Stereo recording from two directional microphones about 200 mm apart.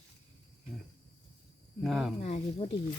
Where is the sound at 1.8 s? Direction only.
Centre (ahead or behind).